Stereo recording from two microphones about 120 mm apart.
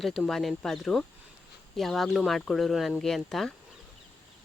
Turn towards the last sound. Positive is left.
turn(degrees=0)  # may be behind; listen again after turning